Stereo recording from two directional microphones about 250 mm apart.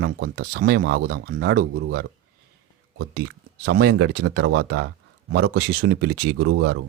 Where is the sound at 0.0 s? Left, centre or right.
Right.